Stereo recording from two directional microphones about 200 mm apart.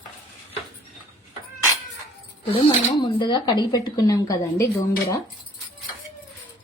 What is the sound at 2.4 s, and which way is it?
Speech, 25° left (ahead or behind).